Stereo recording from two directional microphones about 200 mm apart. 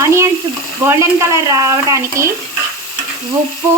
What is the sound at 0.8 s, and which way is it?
Speech, 15° right (ahead or behind).